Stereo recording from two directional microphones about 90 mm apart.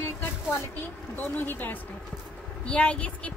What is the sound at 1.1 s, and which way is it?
A woman's voice, 20° left (ahead or behind).